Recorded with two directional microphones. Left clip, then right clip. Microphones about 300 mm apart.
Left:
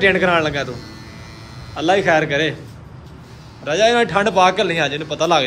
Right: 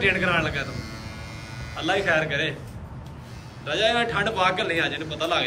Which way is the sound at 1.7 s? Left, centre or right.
Centre.